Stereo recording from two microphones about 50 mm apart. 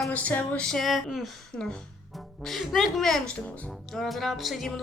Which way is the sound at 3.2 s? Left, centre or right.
Left.